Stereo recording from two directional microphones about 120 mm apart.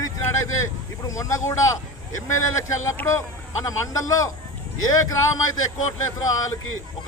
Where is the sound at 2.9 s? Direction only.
20° left (ahead or behind).